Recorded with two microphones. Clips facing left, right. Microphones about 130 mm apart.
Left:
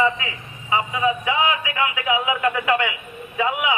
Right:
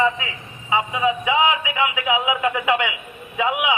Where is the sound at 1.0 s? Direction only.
20° right (ahead or behind).